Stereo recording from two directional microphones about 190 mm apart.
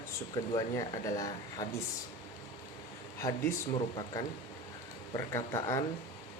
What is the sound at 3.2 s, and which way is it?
Speech, 15° left (ahead or behind).